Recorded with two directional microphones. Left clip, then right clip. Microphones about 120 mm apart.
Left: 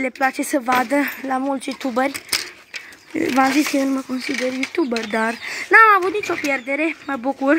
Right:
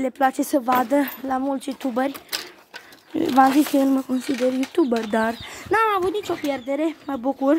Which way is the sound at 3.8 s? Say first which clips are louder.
Right 1 dB; 30° right (ahead or behind).